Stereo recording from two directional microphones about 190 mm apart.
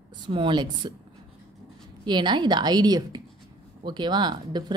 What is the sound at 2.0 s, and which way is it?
A woman's voice, 25° right (ahead or behind).